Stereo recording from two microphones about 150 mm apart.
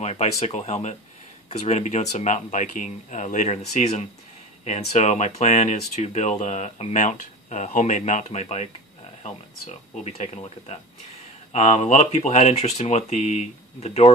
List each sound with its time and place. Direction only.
0.0 s speech: 45° left (ahead or behind)